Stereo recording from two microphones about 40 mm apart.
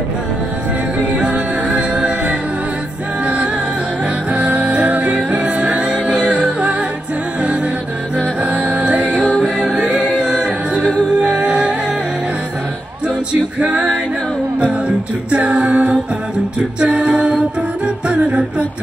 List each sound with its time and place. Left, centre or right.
1.1 s music: right
1.8 s a capella: right
4.3 s music: right
8.4 s music: right
9.6 s a capella: right
11.1 s music: right
13.3 s music: right
14.6 s a capella: right
16.8 s a capella: right